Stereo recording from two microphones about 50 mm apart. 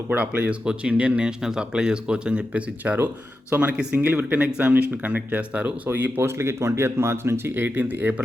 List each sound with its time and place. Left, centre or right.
0.2 s speech: right
1.4 s speech: centre; by 3.1 s right
3.5 s speech: right
3.9 s speech: right
5.9 s speech: right